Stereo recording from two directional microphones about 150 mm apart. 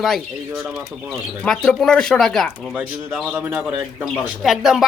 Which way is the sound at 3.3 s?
10° right (ahead or behind).